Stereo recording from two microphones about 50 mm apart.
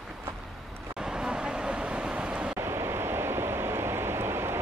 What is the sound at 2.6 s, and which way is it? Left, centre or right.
Waves, right.